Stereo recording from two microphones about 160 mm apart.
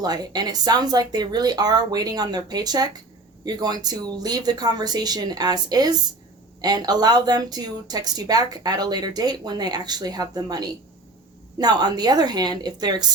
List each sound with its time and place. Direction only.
0.0 s speech: 25° right (ahead or behind)